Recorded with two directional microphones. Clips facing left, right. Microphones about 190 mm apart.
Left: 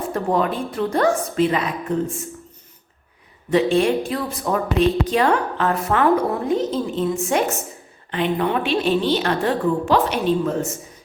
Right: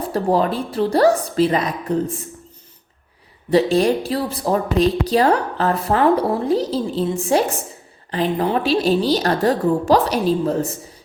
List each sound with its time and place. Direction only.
0.1 s a woman's voice: 35° right (ahead or behind)
3.5 s a woman's voice: 35° right (ahead or behind)